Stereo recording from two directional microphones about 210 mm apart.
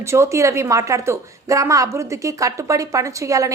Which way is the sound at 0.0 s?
15° right (ahead or behind).